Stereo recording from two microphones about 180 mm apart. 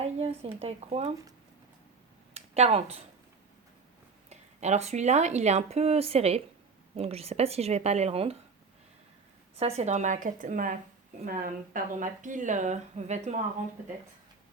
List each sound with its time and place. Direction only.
0.0 s speech: 35° right (ahead or behind)
2.3 s speech: 35° right (ahead or behind)
4.3 s speech: 40° right (ahead or behind)
9.6 s speech: 35° right (ahead or behind)